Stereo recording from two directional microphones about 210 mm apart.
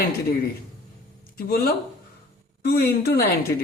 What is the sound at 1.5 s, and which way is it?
A man's voice, 45° left (ahead or behind).